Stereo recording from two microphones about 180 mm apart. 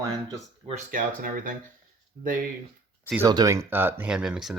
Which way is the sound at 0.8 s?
50° right (ahead or behind).